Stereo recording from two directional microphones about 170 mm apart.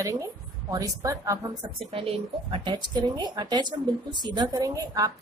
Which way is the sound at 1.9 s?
35° right (ahead or behind).